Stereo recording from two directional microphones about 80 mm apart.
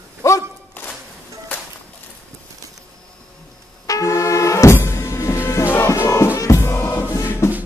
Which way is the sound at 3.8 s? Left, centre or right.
Left.